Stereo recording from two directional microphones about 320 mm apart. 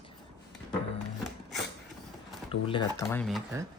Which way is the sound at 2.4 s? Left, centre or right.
Centre.